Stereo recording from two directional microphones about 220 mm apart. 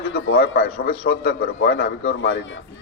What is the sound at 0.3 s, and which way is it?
A man's voice, 45° left (ahead or behind).